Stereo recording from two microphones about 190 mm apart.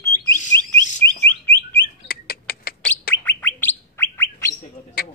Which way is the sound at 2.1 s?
50° left (ahead or behind).